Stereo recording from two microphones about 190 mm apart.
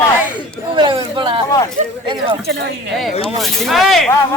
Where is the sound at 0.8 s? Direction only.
25° right (ahead or behind).